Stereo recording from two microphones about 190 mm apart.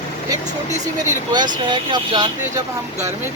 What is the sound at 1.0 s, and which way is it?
Speech, 20° right (ahead or behind).